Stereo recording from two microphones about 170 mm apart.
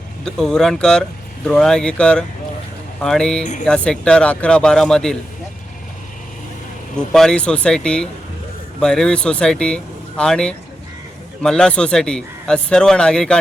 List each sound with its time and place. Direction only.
0.3 s a man's voice: 5° left (ahead or behind)
3.4 s speech: 45° left (ahead or behind)
3.7 s a man's voice: 5° left (ahead or behind)
6.9 s a man's voice: 5° left (ahead or behind)